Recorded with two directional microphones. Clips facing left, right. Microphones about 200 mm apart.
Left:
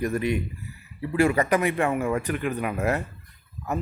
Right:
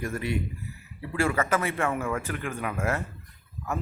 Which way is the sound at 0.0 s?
20° left (ahead or behind).